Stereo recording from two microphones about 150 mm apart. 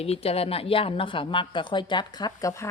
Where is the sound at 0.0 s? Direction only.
40° left (ahead or behind).